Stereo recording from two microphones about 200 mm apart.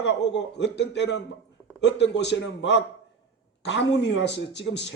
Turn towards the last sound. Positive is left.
turn(degrees=60)  # may be behind; listen again after turning